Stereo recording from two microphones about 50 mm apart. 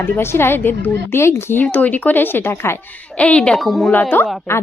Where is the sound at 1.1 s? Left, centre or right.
Left.